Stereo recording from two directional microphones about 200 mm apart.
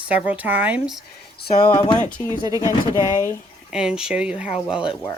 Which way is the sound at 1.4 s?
20° left (ahead or behind).